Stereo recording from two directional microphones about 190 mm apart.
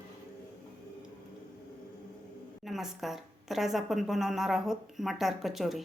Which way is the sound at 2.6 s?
Centre (ahead or behind).